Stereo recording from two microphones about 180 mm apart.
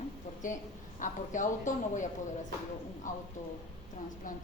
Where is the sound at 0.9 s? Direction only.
45° left (ahead or behind).